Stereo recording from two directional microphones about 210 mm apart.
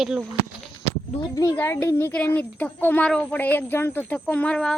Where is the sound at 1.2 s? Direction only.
15° left (ahead or behind).